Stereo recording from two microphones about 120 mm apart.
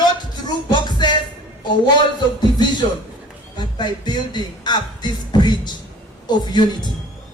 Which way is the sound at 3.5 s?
40° left (ahead or behind).